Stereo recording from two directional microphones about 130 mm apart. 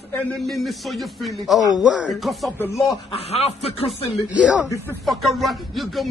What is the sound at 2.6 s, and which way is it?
Speech, 25° left (ahead or behind).